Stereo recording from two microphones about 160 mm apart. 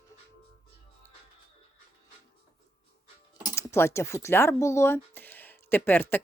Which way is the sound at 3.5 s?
15° left (ahead or behind).